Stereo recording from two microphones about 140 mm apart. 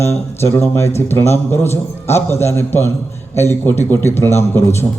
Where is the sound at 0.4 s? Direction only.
20° left (ahead or behind).